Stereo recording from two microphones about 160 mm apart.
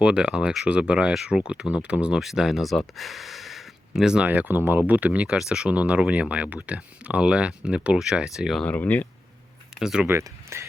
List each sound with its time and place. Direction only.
0.0 s speech: 5° right (ahead or behind)
8.6 s speech: 10° left (ahead or behind)
9.7 s speech: 5° right (ahead or behind)
10.1 s speech: 15° right (ahead or behind)